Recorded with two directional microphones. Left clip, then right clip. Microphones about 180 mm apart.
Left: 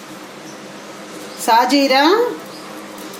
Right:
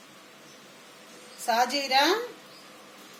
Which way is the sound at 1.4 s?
60° left (ahead or behind).